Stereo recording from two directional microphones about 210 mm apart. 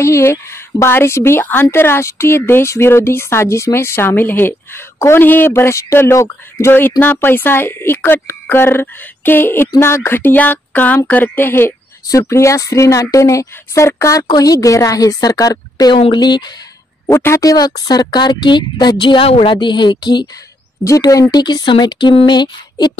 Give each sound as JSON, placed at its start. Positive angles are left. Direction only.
{"t": 0.0, "sound": "a woman's voice", "side_deg": 10}